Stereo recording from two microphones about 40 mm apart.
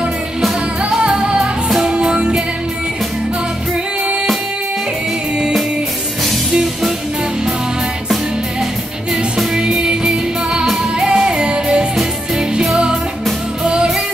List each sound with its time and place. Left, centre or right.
0.8 s music: right
9.1 s music: centre
13.7 s music: right